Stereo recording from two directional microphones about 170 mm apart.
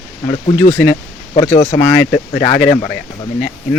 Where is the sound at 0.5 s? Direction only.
15° left (ahead or behind).